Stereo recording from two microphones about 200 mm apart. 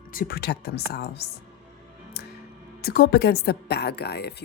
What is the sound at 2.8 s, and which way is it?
Speech, 50° left (ahead or behind).